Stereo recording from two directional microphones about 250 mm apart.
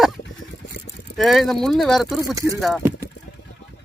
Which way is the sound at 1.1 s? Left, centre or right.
Centre.